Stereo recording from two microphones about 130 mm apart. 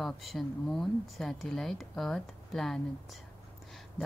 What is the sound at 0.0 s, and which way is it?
Speech, centre (ahead or behind).